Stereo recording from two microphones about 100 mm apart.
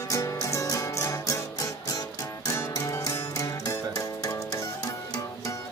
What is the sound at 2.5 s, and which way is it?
Music, 35° left (ahead or behind).